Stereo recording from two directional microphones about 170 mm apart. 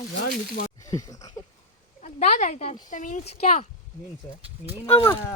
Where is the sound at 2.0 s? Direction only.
45° left (ahead or behind).